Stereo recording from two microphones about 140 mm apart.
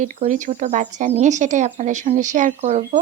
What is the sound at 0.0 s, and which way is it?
Speech, 65° right (ahead or behind).